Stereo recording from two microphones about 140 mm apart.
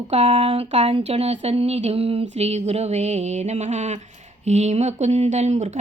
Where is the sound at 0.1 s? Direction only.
50° right (ahead or behind).